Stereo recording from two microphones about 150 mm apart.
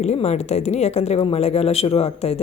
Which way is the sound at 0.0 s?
45° left (ahead or behind).